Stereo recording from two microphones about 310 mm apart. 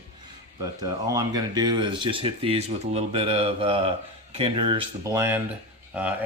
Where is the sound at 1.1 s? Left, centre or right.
Centre.